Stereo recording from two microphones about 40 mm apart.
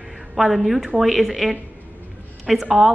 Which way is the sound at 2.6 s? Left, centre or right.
Centre.